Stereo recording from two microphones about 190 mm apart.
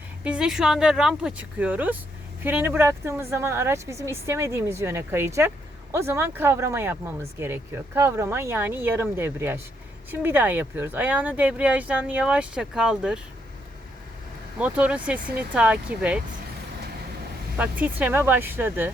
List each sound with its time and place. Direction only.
0.3 s speech: 5° right (ahead or behind)
14.6 s speech: 5° right (ahead or behind)
17.6 s speech: 10° right (ahead or behind)